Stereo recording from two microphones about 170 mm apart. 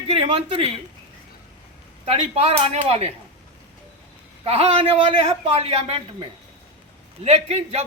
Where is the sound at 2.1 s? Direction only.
35° right (ahead or behind).